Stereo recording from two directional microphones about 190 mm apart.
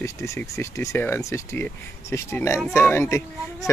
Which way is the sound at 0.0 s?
15° left (ahead or behind).